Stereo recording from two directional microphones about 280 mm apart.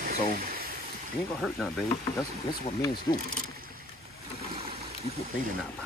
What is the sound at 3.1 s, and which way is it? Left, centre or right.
Speech, centre.